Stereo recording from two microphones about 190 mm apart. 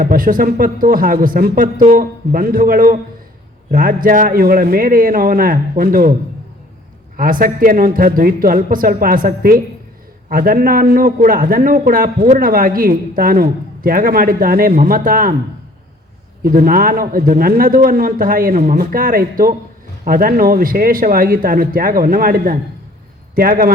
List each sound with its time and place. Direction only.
0.0 s a man's voice: 45° right (ahead or behind)
7.2 s a man's voice: 45° right (ahead or behind)
16.4 s a man's voice: 50° right (ahead or behind)